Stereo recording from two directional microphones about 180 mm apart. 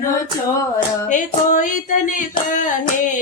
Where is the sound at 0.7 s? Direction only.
45° left (ahead or behind).